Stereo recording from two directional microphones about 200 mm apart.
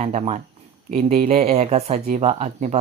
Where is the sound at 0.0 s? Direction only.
35° right (ahead or behind).